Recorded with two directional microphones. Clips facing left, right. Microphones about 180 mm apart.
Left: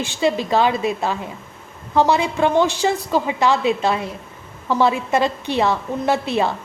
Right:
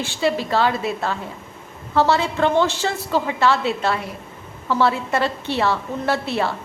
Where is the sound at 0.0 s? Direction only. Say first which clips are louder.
Left 2 dB; 20° left (ahead or behind).